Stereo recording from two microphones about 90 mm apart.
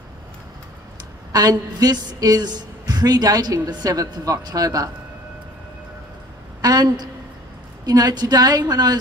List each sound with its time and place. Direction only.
1.3 s a woman's voice: 45° right (ahead or behind)
6.6 s a sound: 50° right (ahead or behind)
7.8 s a woman's voice: 45° right (ahead or behind)